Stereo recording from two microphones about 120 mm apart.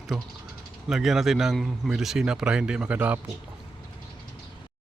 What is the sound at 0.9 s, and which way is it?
A man's voice, 5° right (ahead or behind).